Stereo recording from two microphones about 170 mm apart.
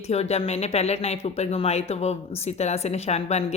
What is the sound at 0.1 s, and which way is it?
Speech, 40° left (ahead or behind).